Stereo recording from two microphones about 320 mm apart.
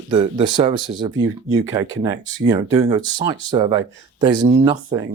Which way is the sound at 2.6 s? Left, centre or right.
Centre.